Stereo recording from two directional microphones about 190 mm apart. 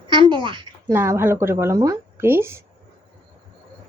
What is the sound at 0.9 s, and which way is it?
A woman's voice, 15° right (ahead or behind).